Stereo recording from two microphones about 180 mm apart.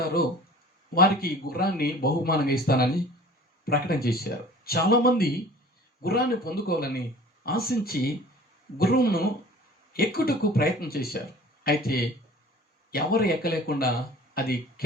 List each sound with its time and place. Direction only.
0.9 s speech: 55° left (ahead or behind)